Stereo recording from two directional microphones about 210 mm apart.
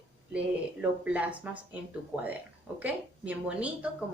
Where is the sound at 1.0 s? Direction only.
5° right (ahead or behind).